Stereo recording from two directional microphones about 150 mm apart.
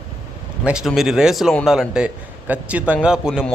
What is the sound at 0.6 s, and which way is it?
A man's voice, 5° right (ahead or behind).